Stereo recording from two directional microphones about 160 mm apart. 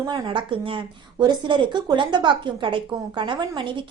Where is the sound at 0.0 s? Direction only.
30° right (ahead or behind).